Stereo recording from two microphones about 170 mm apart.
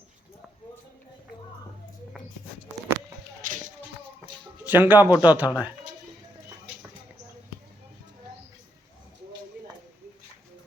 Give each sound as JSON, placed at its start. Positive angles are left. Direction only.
{"t": 3.4, "sound": "music", "side_deg": -50}
{"t": 4.6, "sound": "a man's voice", "side_deg": -10}
{"t": 5.5, "sound": "a sound", "side_deg": -10}